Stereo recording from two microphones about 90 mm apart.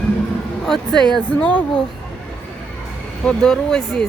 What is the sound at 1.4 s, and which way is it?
Speech, 15° left (ahead or behind).